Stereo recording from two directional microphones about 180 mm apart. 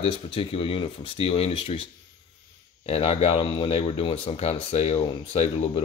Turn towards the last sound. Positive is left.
turn(degrees=35)  # may be behind; listen again after turning